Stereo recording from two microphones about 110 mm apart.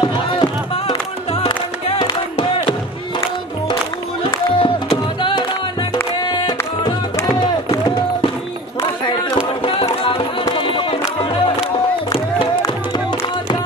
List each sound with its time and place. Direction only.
0.0 s music: 45° left (ahead or behind)
2.0 s music: 55° left (ahead or behind)
4.5 s music: 55° left (ahead or behind)
9.8 s music: 50° left (ahead or behind)